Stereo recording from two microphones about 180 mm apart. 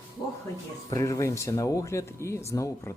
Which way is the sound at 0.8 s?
20° left (ahead or behind).